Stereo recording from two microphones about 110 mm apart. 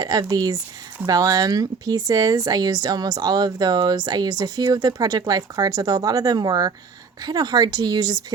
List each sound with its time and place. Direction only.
0.0 s speech: 35° right (ahead or behind)